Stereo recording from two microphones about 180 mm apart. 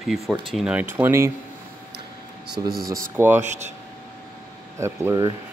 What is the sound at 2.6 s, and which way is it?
Speech, 20° right (ahead or behind).